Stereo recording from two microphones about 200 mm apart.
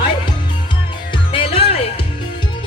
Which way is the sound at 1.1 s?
25° left (ahead or behind).